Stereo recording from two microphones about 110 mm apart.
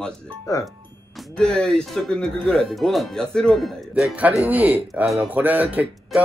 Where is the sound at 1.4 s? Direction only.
5° left (ahead or behind).